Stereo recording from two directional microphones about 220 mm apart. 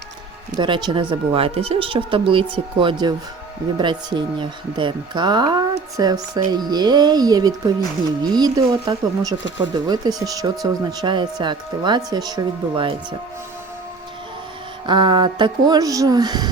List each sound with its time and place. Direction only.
0.5 s speech: 20° right (ahead or behind)
14.8 s speech: 20° right (ahead or behind)